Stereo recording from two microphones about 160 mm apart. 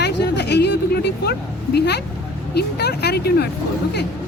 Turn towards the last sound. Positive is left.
turn(degrees=85)